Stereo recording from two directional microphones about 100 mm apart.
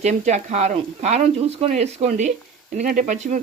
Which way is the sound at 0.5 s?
90° right.